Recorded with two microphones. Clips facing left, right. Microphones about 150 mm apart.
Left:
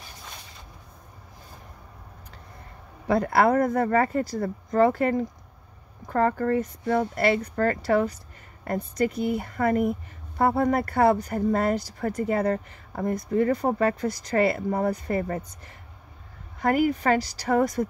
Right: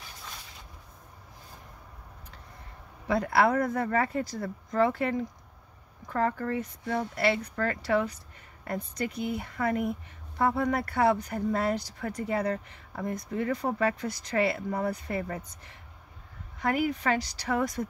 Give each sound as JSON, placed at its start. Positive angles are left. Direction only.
{"t": 3.1, "sound": "speech", "side_deg": 45}